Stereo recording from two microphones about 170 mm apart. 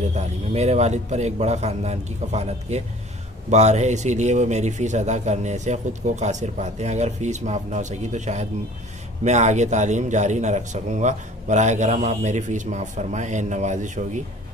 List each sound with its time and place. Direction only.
0.1 s a man's voice: 40° right (ahead or behind)